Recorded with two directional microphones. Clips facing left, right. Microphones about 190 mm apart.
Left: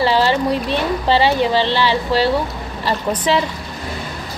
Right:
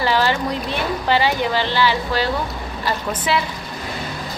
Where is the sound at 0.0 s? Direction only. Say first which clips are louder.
Left 3 dB; 20° left (ahead or behind).